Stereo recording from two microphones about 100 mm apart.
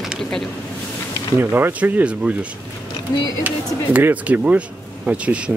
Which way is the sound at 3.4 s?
20° right (ahead or behind).